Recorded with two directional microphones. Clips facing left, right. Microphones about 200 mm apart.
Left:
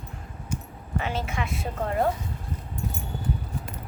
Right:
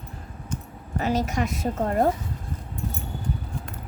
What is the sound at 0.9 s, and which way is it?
A woman's voice, 40° right (ahead or behind).